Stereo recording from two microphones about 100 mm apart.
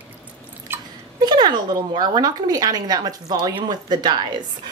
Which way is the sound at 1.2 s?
45° right (ahead or behind).